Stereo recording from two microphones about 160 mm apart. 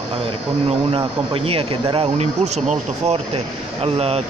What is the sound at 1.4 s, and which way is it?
Speech, 35° right (ahead or behind).